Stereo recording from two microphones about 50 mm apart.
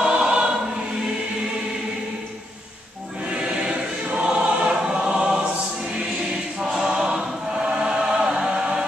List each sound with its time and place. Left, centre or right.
0.0 s choir: centre
3.3 s choir: centre
6.6 s choir: centre
6.9 s chant: centre